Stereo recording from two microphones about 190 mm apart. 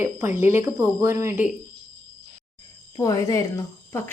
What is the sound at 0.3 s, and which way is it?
Speech, 10° right (ahead or behind).